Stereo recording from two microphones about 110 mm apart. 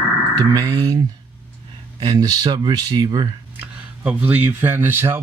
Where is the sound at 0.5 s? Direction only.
35° right (ahead or behind).